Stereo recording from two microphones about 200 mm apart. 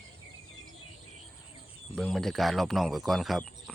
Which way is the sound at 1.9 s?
5° left (ahead or behind).